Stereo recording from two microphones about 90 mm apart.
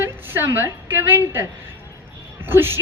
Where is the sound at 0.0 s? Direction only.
25° right (ahead or behind).